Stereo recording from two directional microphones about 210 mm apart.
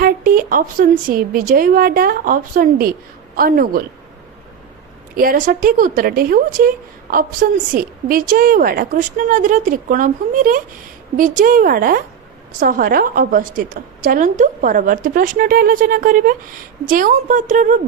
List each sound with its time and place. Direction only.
0.0 s speech: 45° right (ahead or behind)
5.1 s a woman's voice: 40° right (ahead or behind)